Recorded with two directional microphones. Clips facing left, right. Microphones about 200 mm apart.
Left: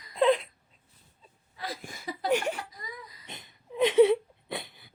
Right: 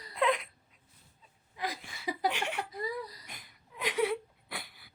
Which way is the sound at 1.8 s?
45° left (ahead or behind).